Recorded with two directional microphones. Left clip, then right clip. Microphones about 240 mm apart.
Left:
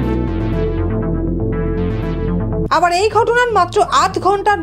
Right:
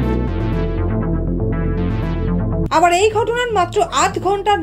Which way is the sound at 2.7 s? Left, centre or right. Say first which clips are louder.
Even; centre.